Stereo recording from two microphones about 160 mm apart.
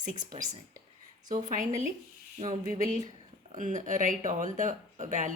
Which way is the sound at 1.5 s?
50° right (ahead or behind).